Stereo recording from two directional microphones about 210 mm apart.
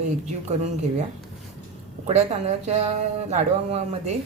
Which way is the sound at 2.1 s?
30° right (ahead or behind).